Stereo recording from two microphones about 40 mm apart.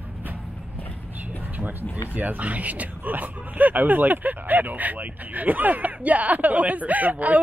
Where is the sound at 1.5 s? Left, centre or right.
Right.